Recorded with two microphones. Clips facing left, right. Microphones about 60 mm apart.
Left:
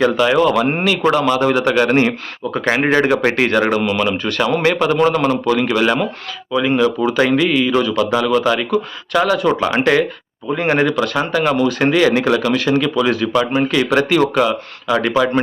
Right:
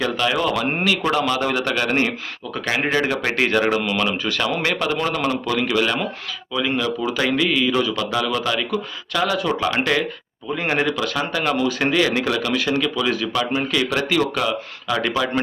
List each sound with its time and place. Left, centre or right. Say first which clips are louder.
0.2 s speech: left 7 dB; centre
2.5 s speech: left 6 dB; left
3.4 s speech: left 4 dB; centre
7.9 s speech: left 7 dB; centre
9.6 s speech: left 5 dB; left
10.6 s speech: left 6 dB; centre